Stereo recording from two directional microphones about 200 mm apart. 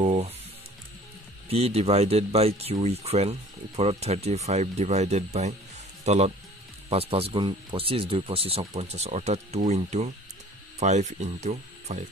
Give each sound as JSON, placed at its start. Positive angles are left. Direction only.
{"t": 0.0, "sound": "music", "side_deg": -35}
{"t": 1.5, "sound": "speech", "side_deg": -30}